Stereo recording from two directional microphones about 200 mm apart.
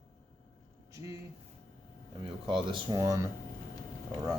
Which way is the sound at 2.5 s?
25° right (ahead or behind).